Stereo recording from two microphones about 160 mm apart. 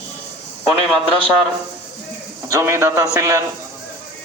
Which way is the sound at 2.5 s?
20° right (ahead or behind).